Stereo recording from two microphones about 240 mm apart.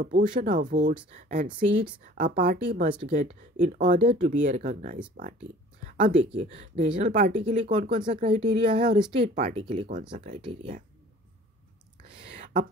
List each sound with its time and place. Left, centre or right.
0.0 s speech: right
2.9 s speech: right
8.1 s speech: right